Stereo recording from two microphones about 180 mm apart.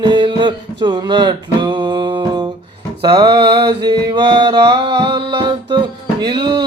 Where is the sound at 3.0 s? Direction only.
25° right (ahead or behind).